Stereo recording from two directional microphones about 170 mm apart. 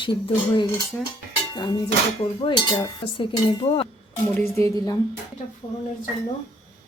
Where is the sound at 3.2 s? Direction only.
35° left (ahead or behind).